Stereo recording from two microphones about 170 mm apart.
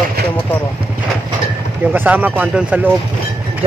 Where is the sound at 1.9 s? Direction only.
10° right (ahead or behind).